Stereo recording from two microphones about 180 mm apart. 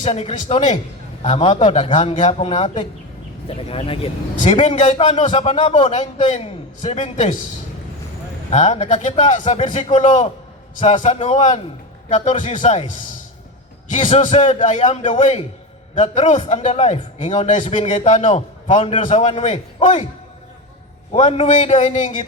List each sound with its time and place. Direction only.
0.0 s a man's voice: 40° left (ahead or behind)
8.4 s a man's voice: 40° left (ahead or behind)
17.8 s a man's voice: 40° left (ahead or behind)
21.1 s a man's voice: 35° left (ahead or behind)